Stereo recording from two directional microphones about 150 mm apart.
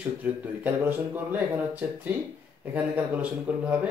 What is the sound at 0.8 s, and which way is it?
A man's voice, 10° right (ahead or behind).